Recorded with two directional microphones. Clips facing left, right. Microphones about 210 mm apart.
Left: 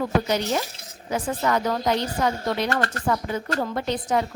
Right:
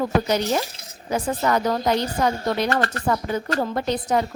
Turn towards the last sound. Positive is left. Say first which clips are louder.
# right 2 dB
turn(degrees=-40)  # may be behind; listen again after turning